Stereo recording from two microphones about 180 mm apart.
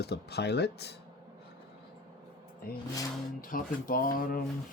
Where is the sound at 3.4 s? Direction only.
50° left (ahead or behind).